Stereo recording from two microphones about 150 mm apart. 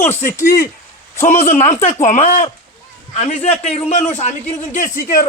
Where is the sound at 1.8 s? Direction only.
50° left (ahead or behind).